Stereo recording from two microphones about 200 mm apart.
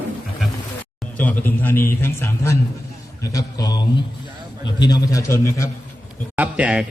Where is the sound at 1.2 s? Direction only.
10° left (ahead or behind).